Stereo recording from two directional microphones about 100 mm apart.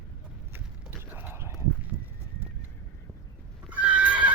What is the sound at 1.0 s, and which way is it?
Clip-clop, 20° right (ahead or behind).